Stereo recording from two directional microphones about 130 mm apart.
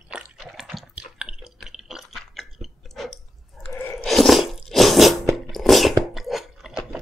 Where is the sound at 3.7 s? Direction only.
15° left (ahead or behind).